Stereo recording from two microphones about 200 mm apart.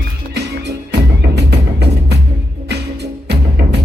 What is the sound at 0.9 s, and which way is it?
Music, 55° right (ahead or behind).